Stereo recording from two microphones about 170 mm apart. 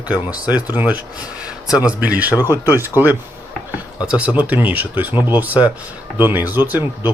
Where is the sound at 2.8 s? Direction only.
10° right (ahead or behind).